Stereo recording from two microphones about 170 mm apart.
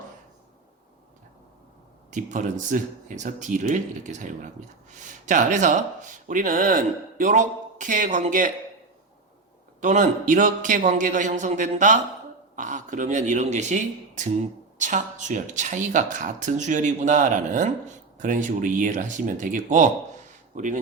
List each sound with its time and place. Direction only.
2.0 s speech: 45° right (ahead or behind)
9.8 s speech: 50° right (ahead or behind)